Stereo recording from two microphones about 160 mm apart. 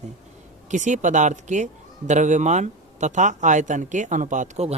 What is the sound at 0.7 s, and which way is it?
Speech, 50° right (ahead or behind).